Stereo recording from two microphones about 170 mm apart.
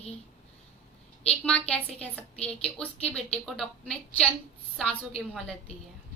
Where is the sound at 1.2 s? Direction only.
5° left (ahead or behind).